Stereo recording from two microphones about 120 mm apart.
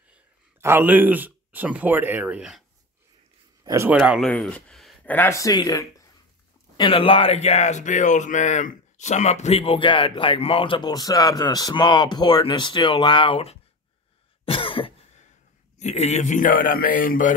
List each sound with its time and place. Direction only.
0.6 s speech: 20° right (ahead or behind)
3.6 s speech: 25° right (ahead or behind)
4.2 s speech: 10° left (ahead or behind)
5.0 s speech: 15° left (ahead or behind)
5.4 s speech: 30° left (ahead or behind)
6.8 s speech: 45° left (ahead or behind)
14.4 s cough: 50° left (ahead or behind)
15.8 s speech: 65° left (ahead or behind); by 16.5 s 85° left